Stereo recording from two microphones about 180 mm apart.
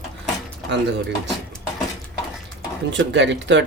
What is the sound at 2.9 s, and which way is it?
Speech, 85° right.